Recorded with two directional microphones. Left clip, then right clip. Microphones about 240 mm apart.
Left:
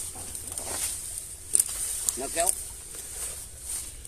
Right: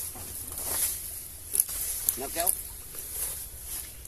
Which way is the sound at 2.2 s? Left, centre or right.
Left.